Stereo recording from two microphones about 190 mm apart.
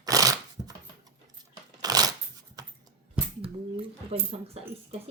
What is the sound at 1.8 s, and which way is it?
Shuffling cards, 20° right (ahead or behind).